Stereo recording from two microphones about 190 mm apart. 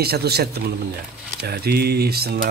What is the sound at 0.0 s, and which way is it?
Speech, 55° right (ahead or behind).